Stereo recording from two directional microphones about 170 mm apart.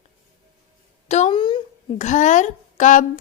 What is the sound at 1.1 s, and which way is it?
Speech, 40° left (ahead or behind).